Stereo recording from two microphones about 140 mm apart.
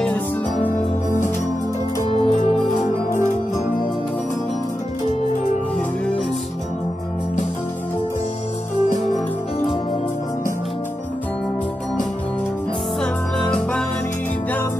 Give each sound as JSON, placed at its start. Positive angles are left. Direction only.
{"t": 0.7, "sound": "music", "side_deg": 65}
{"t": 2.0, "sound": "music", "side_deg": 45}
{"t": 9.0, "sound": "music", "side_deg": 55}
{"t": 13.0, "sound": "music", "side_deg": 5}